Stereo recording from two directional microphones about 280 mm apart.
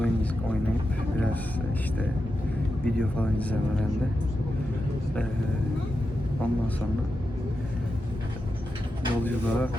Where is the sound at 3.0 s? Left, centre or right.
Centre.